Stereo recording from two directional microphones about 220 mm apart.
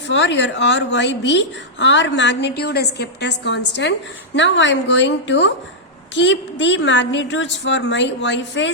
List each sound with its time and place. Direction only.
0.1 s a woman's voice: 55° left (ahead or behind)